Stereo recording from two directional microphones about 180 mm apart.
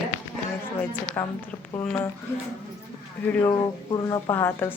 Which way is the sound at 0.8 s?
10° left (ahead or behind).